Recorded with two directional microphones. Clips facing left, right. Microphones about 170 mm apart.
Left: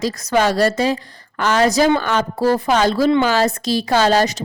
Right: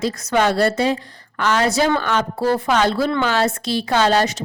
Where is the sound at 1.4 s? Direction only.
40° left (ahead or behind).